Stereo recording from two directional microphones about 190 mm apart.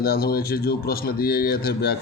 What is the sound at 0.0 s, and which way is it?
Speech, 55° left (ahead or behind).